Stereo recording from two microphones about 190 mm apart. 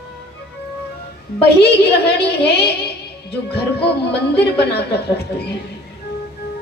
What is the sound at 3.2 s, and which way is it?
Music, 60° left (ahead or behind).